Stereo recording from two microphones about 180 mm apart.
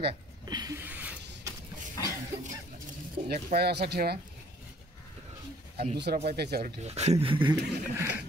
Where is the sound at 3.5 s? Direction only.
65° right (ahead or behind).